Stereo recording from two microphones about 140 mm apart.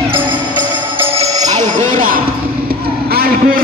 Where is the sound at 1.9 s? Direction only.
75° right (ahead or behind).